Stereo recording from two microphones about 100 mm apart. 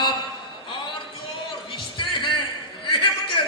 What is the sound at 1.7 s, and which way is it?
Music, 55° left (ahead or behind).